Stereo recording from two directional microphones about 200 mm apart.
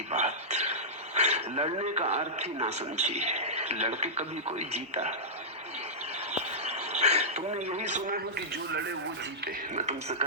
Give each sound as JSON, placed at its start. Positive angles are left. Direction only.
{"t": 0.1, "sound": "speech", "side_deg": -35}
{"t": 6.3, "sound": "a sound", "side_deg": -35}
{"t": 9.7, "sound": "a man's voice", "side_deg": -35}